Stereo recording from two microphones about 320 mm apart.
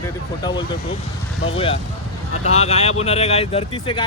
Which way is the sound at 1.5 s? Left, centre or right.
Centre.